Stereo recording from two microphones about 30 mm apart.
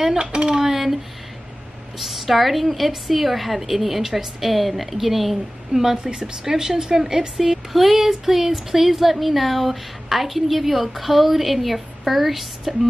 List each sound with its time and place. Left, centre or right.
0.2 s speech: right
0.6 s a sound: centre
2.0 s speech: centre
7.3 s speech: centre